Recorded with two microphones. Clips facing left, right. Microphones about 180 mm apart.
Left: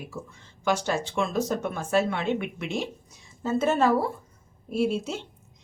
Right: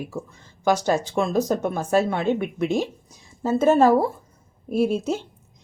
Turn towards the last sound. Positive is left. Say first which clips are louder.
# right 4 dB
turn(degrees=-40)  # may be behind; listen again after turning